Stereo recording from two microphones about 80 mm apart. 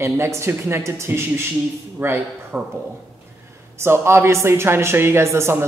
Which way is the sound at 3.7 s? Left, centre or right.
Right.